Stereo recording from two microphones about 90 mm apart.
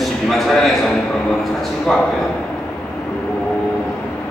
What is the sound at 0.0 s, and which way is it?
Speech, centre (ahead or behind).